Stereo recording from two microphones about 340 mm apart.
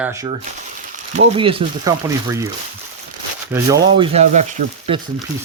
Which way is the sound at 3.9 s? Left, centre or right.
Centre.